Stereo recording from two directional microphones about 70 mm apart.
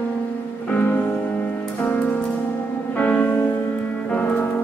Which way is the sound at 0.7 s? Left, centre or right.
Centre.